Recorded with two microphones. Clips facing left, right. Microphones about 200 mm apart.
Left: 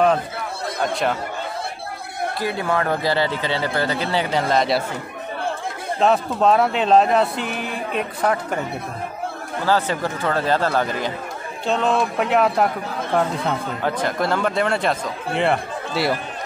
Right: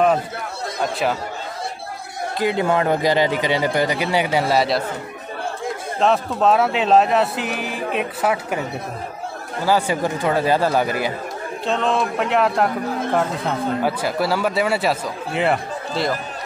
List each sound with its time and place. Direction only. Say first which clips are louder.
2.4 s speech: right 5 dB; 20° right (ahead or behind)
5.9 s speech: even; centre (ahead or behind)
9.7 s speech: right 2 dB; 10° right (ahead or behind)
11.6 s speech: left 1 dB; centre (ahead or behind)